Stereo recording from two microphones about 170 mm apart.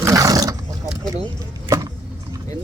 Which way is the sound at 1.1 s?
20° right (ahead or behind).